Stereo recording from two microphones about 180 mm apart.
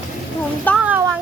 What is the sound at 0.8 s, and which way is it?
Speech, 10° right (ahead or behind).